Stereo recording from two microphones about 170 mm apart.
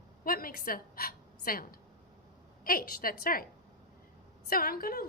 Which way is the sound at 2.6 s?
55° left (ahead or behind).